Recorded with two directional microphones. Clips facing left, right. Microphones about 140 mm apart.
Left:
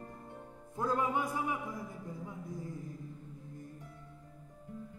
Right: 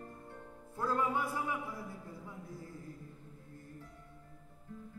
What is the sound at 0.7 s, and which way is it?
Music, 20° left (ahead or behind).